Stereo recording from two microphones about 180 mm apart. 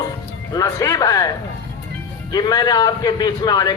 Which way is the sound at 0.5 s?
20° left (ahead or behind).